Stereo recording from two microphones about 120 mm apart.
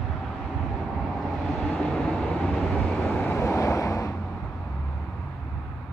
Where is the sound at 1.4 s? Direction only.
Centre (ahead or behind).